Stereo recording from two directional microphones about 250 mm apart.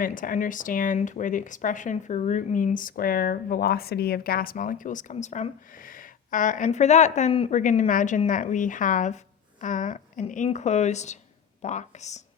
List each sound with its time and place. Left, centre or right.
0.0 s speech: left